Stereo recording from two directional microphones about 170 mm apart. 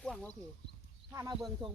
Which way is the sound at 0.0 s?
5° left (ahead or behind).